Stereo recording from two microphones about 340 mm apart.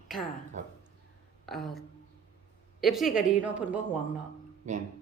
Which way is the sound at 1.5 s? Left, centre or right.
Centre.